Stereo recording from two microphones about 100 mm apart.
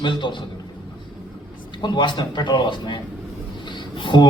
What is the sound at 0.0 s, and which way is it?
Speech, 50° left (ahead or behind).